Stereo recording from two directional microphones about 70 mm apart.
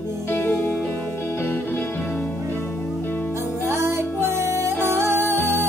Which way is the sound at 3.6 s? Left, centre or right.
Right.